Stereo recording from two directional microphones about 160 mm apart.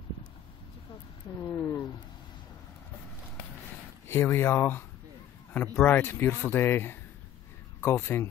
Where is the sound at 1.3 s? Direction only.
15° left (ahead or behind).